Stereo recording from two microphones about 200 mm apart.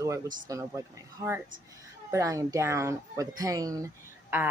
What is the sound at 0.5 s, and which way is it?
Speech, 15° right (ahead or behind).